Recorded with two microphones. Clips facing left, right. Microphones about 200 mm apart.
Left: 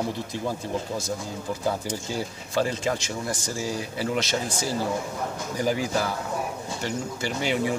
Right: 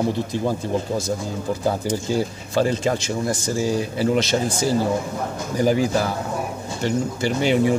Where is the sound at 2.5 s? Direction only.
30° right (ahead or behind).